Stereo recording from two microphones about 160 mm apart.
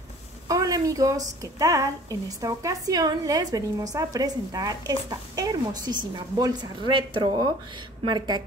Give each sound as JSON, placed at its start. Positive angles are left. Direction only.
{"t": 0.5, "sound": "a woman's voice", "side_deg": -20}